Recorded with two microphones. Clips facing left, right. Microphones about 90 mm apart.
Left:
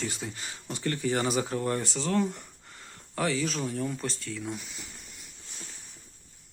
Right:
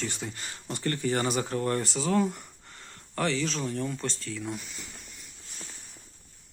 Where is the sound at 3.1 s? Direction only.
5° left (ahead or behind).